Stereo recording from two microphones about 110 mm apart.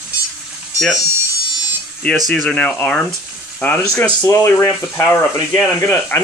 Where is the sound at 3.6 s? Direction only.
20° left (ahead or behind).